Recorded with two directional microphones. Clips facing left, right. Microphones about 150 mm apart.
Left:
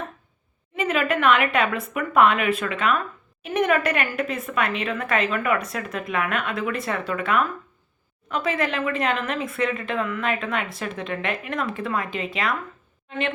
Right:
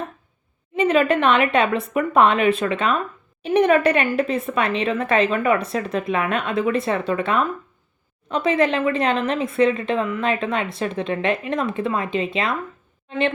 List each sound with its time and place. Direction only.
0.8 s speech: 30° right (ahead or behind)